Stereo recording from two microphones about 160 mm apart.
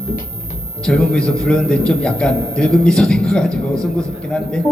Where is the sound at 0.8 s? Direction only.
5° left (ahead or behind).